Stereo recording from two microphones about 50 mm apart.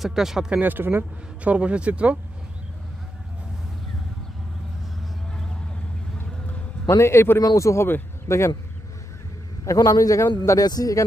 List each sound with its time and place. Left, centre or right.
0.0 s speech: centre
0.6 s speech: right
1.4 s speech: right
7.0 s speech: left
8.3 s speech: left
9.7 s speech: left